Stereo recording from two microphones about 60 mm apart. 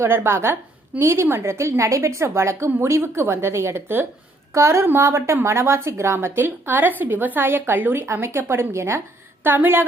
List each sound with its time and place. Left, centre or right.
0.0 s a woman's voice: right
4.5 s a woman's voice: right
6.1 s a woman's voice: right
8.0 s a woman's voice: right
9.4 s a woman's voice: right